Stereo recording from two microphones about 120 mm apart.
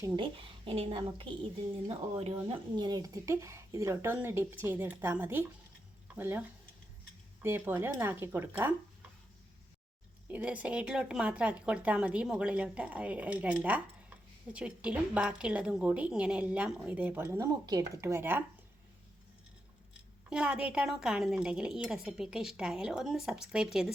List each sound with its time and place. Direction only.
0.2 s speech: 50° right (ahead or behind); by 6.4 s 15° right (ahead or behind)
7.4 s speech: 20° right (ahead or behind)
10.2 s speech: 10° right (ahead or behind)
17.4 s speech: 30° right (ahead or behind); by 18.4 s 15° right (ahead or behind)
19.9 s a woman's voice: 10° right (ahead or behind)